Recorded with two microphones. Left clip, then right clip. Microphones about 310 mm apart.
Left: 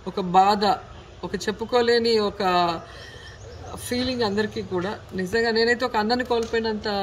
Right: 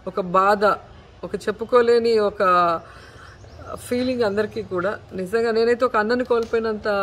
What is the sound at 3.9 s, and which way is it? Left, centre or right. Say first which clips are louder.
Speech: right 3 dB; centre.